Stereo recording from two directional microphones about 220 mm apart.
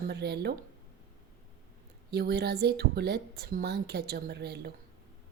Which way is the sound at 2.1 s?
45° right (ahead or behind).